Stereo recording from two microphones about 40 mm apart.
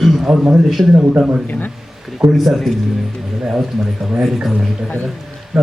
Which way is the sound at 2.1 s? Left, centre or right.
Centre.